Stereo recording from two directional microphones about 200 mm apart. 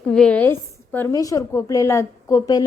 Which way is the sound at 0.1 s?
5° left (ahead or behind).